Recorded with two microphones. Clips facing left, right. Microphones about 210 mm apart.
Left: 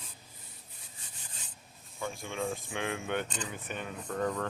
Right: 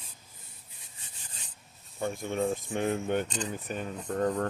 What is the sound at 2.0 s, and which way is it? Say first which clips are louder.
Speech: right 6 dB; 45° right (ahead or behind).